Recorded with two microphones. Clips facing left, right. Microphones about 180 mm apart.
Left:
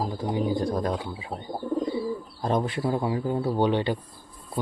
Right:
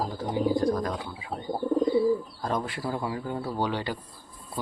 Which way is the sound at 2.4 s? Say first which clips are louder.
Left 4 dB; 20° left (ahead or behind).